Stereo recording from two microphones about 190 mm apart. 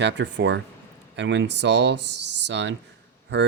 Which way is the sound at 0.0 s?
70° right (ahead or behind).